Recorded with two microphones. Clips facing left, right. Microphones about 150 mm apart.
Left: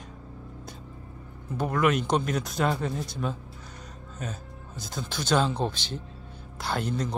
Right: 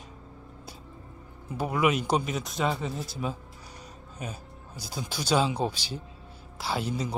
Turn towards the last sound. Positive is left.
turn(degrees=-5)  # may be behind; listen again after turning